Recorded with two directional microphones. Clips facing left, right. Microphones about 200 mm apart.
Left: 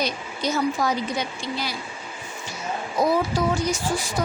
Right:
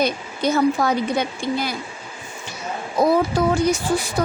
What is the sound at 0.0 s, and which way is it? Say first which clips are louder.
Speech: right 5 dB; 55° right (ahead or behind).